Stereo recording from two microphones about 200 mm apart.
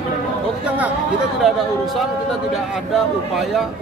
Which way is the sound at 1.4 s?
Centre (ahead or behind).